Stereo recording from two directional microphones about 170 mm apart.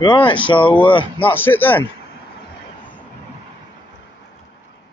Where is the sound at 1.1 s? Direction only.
10° left (ahead or behind).